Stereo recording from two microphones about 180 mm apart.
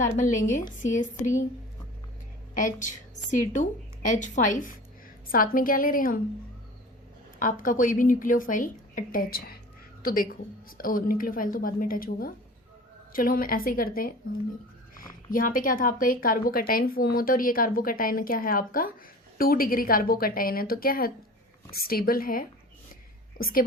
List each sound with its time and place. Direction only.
0.2 s speech: 45° left (ahead or behind)
2.6 s speech: 45° left (ahead or behind)
7.3 s speech: 50° left (ahead or behind)
15.3 s a woman's voice: 50° left (ahead or behind)